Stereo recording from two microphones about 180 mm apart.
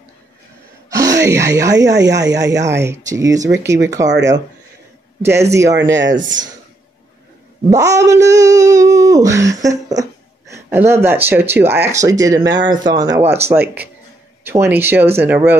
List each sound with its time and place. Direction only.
0.8 s a sound: 15° right (ahead or behind)
1.2 s speech: 20° right (ahead or behind)
2.0 s speech: 75° right (ahead or behind)
2.2 s speech: 20° right (ahead or behind)
5.5 s speech: 15° right (ahead or behind)
5.9 s speech: 90° right
7.7 s a sound: 20° right (ahead or behind)
10.5 s speech: 15° right (ahead or behind)